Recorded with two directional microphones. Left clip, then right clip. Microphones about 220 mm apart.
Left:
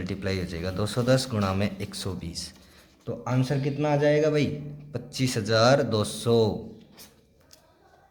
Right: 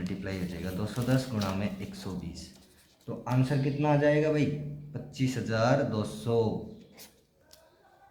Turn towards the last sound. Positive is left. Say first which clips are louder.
# left 6 dB
turn(degrees=50)  # may be behind; listen again after turning